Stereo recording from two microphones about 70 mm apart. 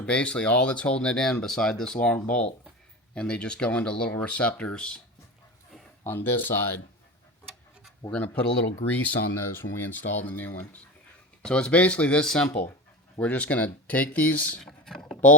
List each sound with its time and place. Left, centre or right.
0.0 s speech: centre
6.1 s speech: left
8.1 s speech: left
14.6 s speech: centre